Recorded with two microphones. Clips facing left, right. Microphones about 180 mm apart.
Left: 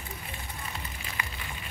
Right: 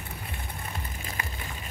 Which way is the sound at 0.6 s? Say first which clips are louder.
Right 1 dB; 50° right (ahead or behind).